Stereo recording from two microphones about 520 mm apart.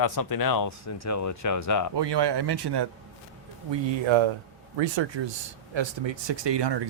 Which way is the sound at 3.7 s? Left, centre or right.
Right.